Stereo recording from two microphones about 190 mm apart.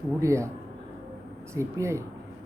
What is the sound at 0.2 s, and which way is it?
Speech, 15° right (ahead or behind).